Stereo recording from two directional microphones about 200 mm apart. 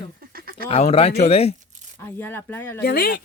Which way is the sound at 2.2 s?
10° left (ahead or behind).